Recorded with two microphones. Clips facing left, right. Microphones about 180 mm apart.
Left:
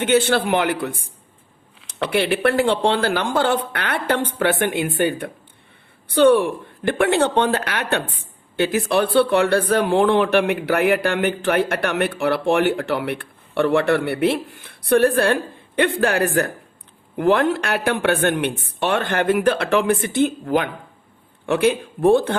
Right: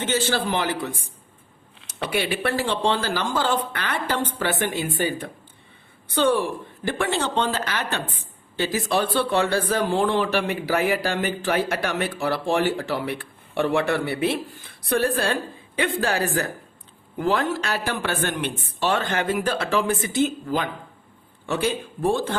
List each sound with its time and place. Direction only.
0.0 s speech: 60° left (ahead or behind)